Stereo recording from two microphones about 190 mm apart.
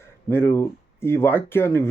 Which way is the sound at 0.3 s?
15° left (ahead or behind).